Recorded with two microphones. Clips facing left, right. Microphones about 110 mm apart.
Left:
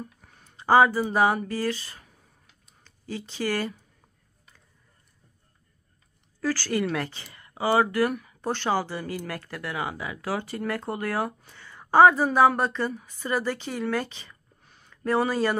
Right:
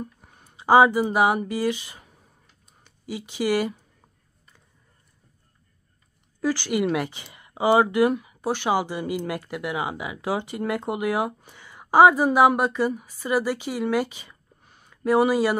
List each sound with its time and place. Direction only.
0.0 s speech: 20° right (ahead or behind)
6.4 s speech: 15° right (ahead or behind)